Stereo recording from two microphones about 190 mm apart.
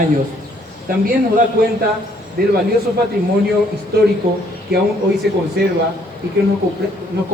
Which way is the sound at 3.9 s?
60° right (ahead or behind).